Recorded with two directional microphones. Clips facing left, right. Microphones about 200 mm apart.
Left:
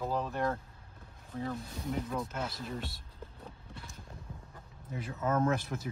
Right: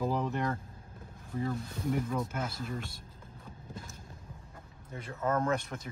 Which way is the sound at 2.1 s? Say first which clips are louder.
Right 2 dB; centre (ahead or behind).